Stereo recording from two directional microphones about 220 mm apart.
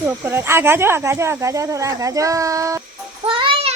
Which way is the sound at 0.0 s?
10° right (ahead or behind).